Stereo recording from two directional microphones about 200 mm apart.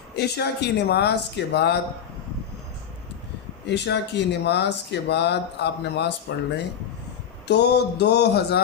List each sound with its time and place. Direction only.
0.2 s speech: 55° left (ahead or behind)
3.7 s speech: 60° left (ahead or behind)